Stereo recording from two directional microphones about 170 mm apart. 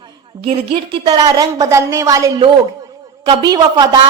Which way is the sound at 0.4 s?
30° right (ahead or behind).